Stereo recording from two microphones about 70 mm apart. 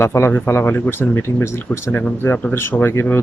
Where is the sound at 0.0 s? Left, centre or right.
Left.